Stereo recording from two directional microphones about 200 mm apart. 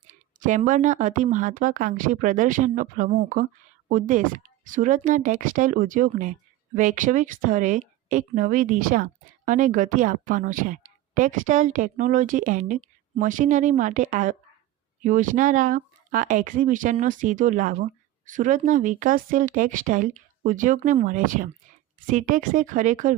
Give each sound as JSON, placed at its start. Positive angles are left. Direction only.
{"t": 0.3, "sound": "a woman's voice", "side_deg": -40}